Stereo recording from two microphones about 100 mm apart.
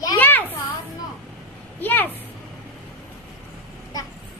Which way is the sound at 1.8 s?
20° left (ahead or behind).